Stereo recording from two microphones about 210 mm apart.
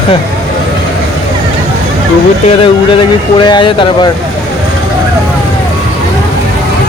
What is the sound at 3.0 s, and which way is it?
Speech, 20° left (ahead or behind).